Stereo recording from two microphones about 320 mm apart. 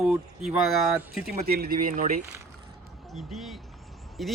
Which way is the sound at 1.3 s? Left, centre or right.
Right.